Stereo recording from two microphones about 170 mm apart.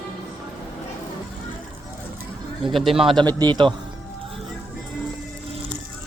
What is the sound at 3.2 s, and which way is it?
Speech, 25° right (ahead or behind).